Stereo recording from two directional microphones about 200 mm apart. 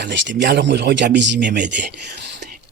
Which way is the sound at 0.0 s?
60° right (ahead or behind).